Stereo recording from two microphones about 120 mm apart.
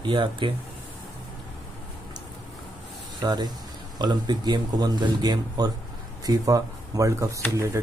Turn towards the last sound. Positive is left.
turn(degrees=-25)  # may be behind; listen again after turning